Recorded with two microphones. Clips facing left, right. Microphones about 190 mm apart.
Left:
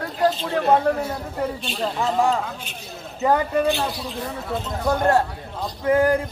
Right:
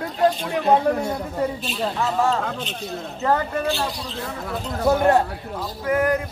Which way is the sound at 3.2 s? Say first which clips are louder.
Left 3 dB; 15° left (ahead or behind).